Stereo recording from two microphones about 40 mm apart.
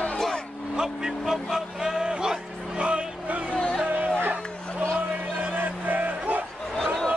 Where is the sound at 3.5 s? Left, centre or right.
Centre.